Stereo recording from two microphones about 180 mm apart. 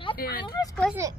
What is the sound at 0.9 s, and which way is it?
Speech, 15° right (ahead or behind).